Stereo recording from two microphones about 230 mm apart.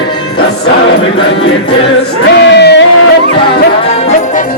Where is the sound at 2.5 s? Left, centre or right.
Left.